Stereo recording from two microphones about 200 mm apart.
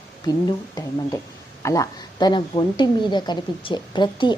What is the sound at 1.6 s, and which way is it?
Speech, 15° left (ahead or behind).